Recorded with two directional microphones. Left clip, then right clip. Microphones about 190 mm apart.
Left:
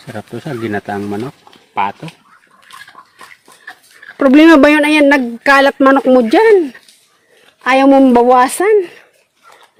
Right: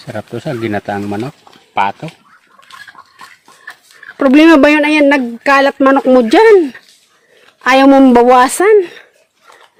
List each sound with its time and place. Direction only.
0.1 s speech: 35° right (ahead or behind)
4.2 s a woman's voice: centre (ahead or behind)